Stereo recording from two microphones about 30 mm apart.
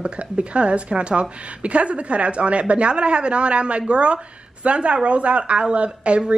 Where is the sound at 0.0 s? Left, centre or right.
Right.